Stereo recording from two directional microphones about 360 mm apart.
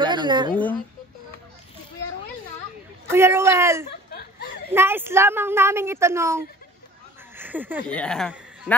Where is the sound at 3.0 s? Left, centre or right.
Centre.